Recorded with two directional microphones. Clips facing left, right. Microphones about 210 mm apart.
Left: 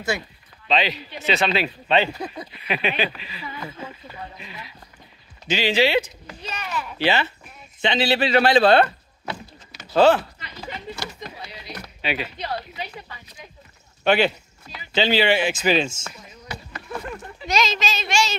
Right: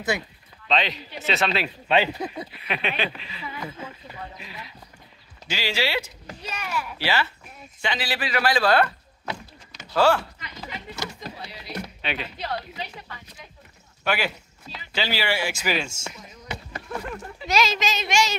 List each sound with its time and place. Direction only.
0.1 s speech: 15° right (ahead or behind)
0.7 s speech: centre (ahead or behind); by 2.3 s 15° right (ahead or behind)
2.3 s speech: centre (ahead or behind)
5.5 s speech: 20° left (ahead or behind)
6.4 s speech: 10° right (ahead or behind)
7.0 s speech: 20° left (ahead or behind)
9.9 s speech: 20° left (ahead or behind)
11.4 s music: centre (ahead or behind)
12.0 s speech: 5° left (ahead or behind)
14.0 s speech: 25° left (ahead or behind)
16.9 s speech: 5° right (ahead or behind)
17.7 s speech: 15° right (ahead or behind)